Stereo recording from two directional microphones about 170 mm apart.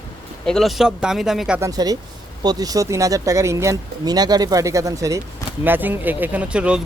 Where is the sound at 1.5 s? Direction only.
20° right (ahead or behind).